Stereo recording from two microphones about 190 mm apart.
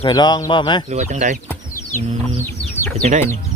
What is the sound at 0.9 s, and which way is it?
Speech, 40° right (ahead or behind).